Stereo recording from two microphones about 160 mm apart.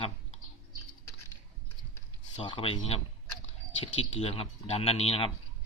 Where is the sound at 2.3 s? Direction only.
35° left (ahead or behind).